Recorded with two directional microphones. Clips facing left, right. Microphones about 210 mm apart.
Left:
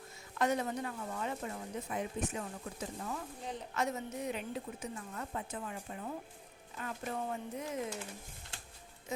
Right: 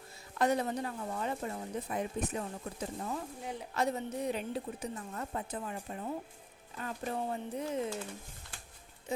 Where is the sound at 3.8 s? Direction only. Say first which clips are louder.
Right 4 dB; 35° right (ahead or behind).